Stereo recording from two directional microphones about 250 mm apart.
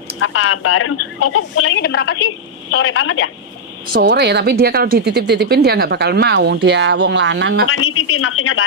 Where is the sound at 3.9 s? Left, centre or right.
Right.